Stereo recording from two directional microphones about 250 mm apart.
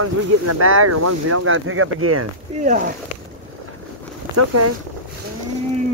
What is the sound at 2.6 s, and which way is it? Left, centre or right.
Speech, right.